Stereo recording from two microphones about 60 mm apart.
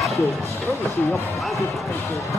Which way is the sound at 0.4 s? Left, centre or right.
Left.